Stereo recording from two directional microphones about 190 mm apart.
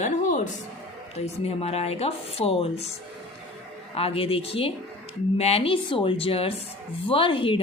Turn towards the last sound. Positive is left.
turn(degrees=25)  # may be behind; listen again after turning